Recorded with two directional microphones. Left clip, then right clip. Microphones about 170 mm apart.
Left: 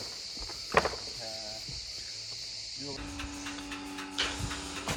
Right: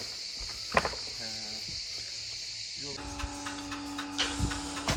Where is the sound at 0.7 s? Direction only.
30° left (ahead or behind).